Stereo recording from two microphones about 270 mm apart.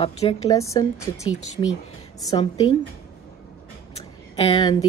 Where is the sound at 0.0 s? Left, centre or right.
Left.